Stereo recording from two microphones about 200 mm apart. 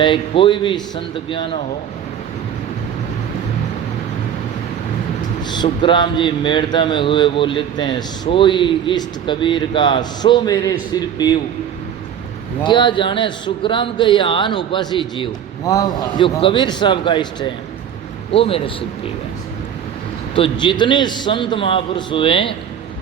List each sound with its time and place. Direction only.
0.0 s speech: 25° left (ahead or behind)
5.4 s a sound: 20° left (ahead or behind)
5.6 s speech: 25° left (ahead or behind)
12.6 s speech: 25° left (ahead or behind)
20.3 s speech: 25° left (ahead or behind)